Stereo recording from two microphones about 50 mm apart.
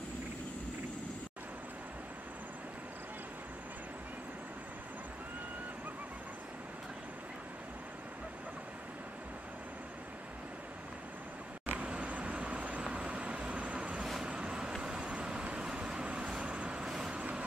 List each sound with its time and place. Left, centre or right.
11.6 s vehicle: right